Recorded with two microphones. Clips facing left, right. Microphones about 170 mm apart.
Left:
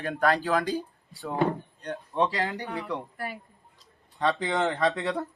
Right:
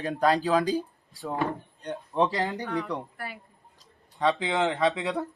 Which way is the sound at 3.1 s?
40° left (ahead or behind).